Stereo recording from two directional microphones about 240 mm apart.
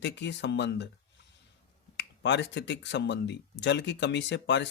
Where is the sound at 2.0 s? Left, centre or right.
Left.